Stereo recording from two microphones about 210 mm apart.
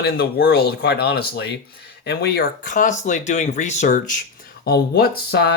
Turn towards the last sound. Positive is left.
turn(degrees=50)  # may be behind; listen again after turning